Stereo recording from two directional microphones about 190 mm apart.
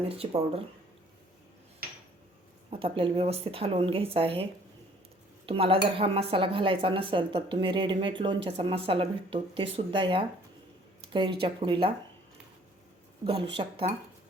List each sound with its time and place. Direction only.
0.1 s speech: 30° right (ahead or behind)
2.6 s dishes: 30° right (ahead or behind)
5.5 s dishes: 30° right (ahead or behind)
13.2 s dishes: 30° right (ahead or behind)